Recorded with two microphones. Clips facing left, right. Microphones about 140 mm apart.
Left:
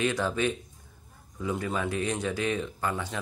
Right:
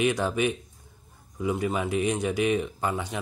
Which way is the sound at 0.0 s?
15° right (ahead or behind).